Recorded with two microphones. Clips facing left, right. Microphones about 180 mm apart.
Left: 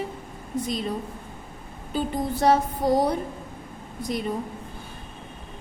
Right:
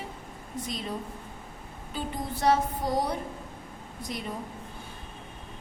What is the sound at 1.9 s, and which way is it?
Speech, 35° left (ahead or behind).